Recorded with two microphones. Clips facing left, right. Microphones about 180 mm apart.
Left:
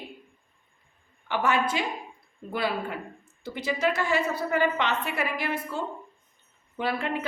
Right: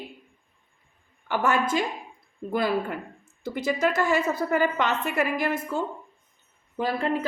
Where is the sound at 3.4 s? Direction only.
50° right (ahead or behind).